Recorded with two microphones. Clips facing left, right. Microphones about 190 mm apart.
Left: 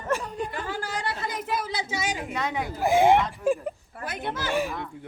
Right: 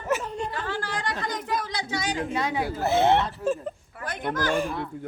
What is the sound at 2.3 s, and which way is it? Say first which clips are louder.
Speech: right 3 dB; 35° right (ahead or behind).